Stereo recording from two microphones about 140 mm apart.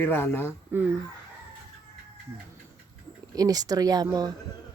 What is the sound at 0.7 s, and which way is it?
Speech, 15° right (ahead or behind).